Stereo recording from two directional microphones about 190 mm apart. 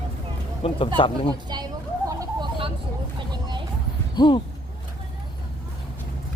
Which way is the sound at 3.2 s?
25° right (ahead or behind).